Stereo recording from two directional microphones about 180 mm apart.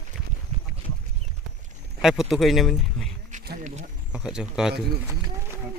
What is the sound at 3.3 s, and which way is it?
Insect, 40° right (ahead or behind).